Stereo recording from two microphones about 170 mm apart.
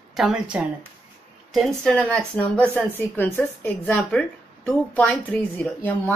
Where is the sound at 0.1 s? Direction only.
5° right (ahead or behind).